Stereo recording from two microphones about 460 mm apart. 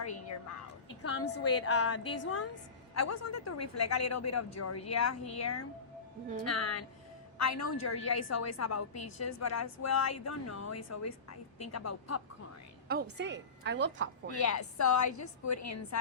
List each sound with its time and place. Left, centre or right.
1.0 s a woman's voice: left
12.9 s a woman's voice: right
14.3 s a woman's voice: left